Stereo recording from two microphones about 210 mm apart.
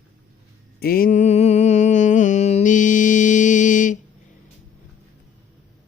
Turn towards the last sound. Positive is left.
turn(degrees=40)  # may be behind; listen again after turning